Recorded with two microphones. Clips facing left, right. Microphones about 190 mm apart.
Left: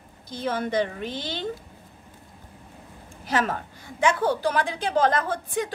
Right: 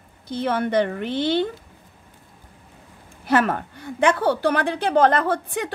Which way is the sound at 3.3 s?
60° right (ahead or behind).